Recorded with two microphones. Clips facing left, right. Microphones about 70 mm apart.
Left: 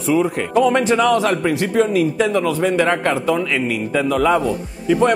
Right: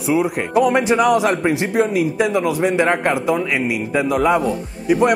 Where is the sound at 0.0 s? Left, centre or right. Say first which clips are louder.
Left 1 dB; centre.